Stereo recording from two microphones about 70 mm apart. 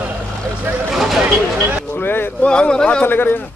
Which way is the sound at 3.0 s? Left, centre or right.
Left.